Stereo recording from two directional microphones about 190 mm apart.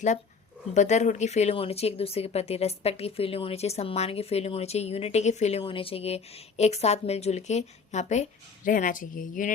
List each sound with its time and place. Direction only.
0.7 s speech: 40° left (ahead or behind)